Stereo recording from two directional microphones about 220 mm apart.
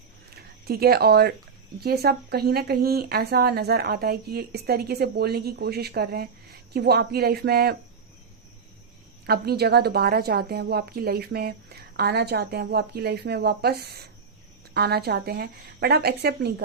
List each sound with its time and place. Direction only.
0.3 s speech: 45° right (ahead or behind)
9.2 s speech: 45° right (ahead or behind)